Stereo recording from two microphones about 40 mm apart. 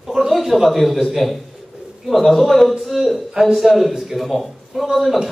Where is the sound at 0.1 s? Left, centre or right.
Centre.